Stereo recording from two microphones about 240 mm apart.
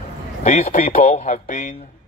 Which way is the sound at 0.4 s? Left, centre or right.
Left.